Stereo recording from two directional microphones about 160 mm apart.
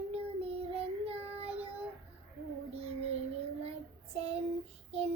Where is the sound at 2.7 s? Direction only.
40° right (ahead or behind).